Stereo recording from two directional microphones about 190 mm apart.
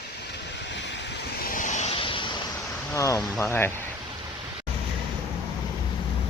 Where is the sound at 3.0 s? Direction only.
15° left (ahead or behind).